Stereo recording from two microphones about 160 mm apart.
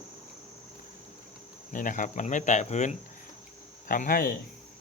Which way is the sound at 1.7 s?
55° left (ahead or behind).